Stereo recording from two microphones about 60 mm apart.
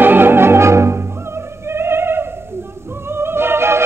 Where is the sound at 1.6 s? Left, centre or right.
Right.